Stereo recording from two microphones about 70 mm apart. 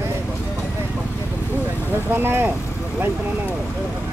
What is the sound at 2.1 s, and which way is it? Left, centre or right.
Speech, right.